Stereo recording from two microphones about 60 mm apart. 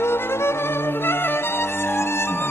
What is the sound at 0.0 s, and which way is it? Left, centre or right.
Music, left.